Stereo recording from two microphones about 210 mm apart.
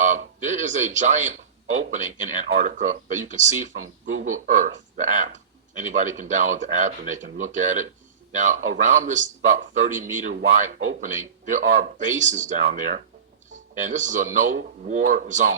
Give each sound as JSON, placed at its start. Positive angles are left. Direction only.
{"t": 0.0, "sound": "speech", "side_deg": -35}